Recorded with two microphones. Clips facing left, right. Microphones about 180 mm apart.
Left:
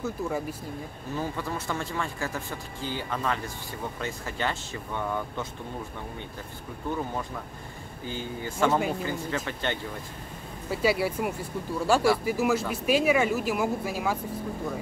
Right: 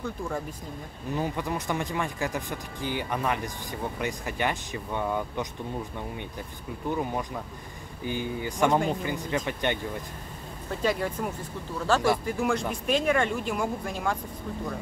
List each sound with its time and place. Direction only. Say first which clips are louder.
0.0 s speech: left 2 dB; 5° left (ahead or behind)
1.1 s speech: right 2 dB; 15° right (ahead or behind)
8.0 s speech: right 4 dB; 15° right (ahead or behind)
10.7 s speech: left 2 dB; 10° left (ahead or behind)